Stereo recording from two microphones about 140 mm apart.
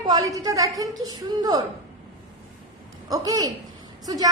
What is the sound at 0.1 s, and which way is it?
A woman's voice, 25° right (ahead or behind).